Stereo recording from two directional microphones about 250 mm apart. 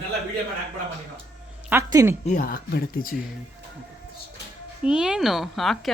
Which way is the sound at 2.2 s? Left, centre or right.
Left.